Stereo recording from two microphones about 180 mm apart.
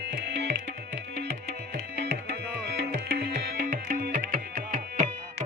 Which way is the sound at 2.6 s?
60° right (ahead or behind).